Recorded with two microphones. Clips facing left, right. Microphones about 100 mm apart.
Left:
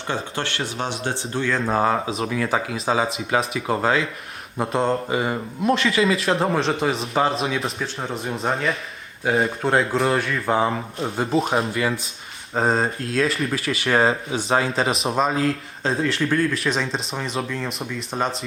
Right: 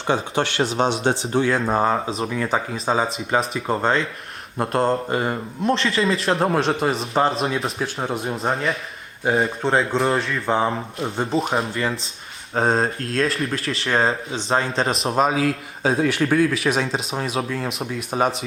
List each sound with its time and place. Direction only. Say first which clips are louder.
0.8 s speech: right 7 dB; 20° right (ahead or behind)
1.5 s speech: right 1 dB; 5° right (ahead or behind)